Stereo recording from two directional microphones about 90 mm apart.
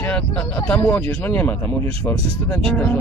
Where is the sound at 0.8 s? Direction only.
30° left (ahead or behind).